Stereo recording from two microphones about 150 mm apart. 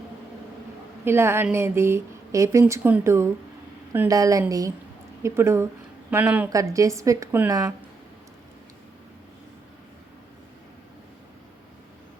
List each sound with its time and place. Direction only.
1.0 s a woman's voice: 15° right (ahead or behind)
6.5 s a woman's voice: 20° right (ahead or behind)